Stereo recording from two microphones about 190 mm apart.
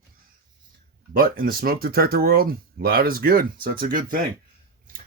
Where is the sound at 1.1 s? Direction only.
50° right (ahead or behind).